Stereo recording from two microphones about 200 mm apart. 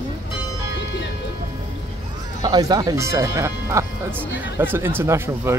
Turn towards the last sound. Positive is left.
turn(degrees=-10)  # may be behind; listen again after turning